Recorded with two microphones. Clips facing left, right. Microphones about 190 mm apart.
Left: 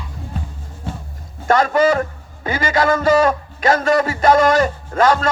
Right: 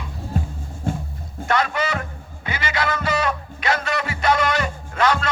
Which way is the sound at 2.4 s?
45° left (ahead or behind).